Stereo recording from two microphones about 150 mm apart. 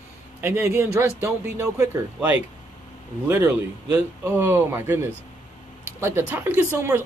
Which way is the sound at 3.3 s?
10° right (ahead or behind).